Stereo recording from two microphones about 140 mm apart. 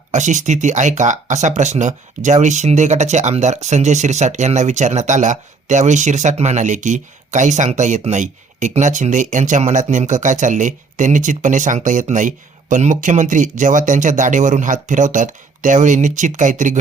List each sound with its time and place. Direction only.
0.1 s speech: 60° right (ahead or behind)